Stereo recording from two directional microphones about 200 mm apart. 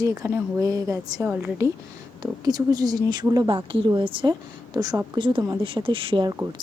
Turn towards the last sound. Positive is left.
turn(degrees=-20)  # may be behind; listen again after turning